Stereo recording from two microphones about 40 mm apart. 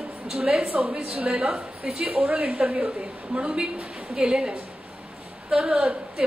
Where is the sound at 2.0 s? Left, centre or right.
Right.